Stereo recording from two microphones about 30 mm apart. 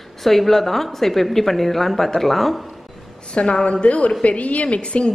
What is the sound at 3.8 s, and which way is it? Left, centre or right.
A woman's voice, left.